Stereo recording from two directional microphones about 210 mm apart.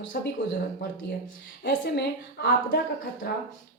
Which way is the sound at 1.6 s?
55° left (ahead or behind).